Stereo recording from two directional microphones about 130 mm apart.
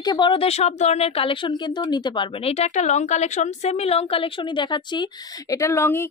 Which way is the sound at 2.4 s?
55° left (ahead or behind).